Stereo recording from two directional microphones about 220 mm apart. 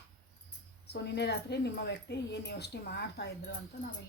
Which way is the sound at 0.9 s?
50° left (ahead or behind).